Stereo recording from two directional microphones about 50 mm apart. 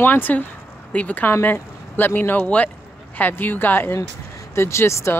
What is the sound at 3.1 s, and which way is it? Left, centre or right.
Speech, left.